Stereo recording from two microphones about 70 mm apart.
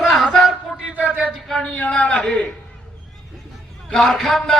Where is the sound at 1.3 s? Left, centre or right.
Centre.